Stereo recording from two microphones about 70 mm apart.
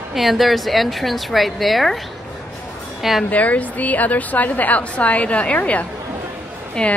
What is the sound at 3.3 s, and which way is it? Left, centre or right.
A woman's voice, left.